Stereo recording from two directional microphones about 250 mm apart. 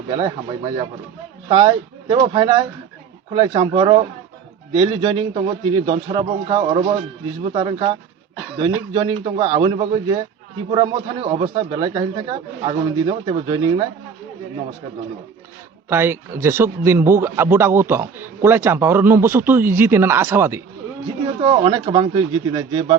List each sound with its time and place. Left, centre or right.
0.2 s a man's voice: centre
15.9 s a man's voice: centre
21.4 s speech: centre